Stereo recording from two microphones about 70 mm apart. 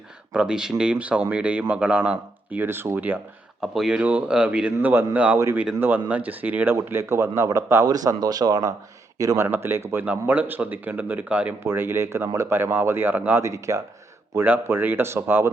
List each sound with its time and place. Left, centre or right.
0.3 s speech: centre
3.6 s a man's voice: centre
6.8 s speech: right
7.9 s speech: right
9.1 s speech: right
9.4 s a man's voice: right; by 11.5 s centre
11.6 s speech: right
13.4 s speech: right
14.3 s speech: right